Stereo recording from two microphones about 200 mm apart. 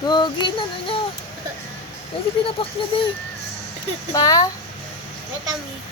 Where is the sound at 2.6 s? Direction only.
25° left (ahead or behind).